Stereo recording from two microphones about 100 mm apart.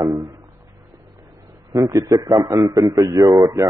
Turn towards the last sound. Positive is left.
turn(degrees=-35)  # may be behind; listen again after turning